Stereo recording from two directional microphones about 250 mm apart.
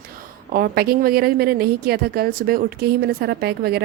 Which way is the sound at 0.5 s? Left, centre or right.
Right.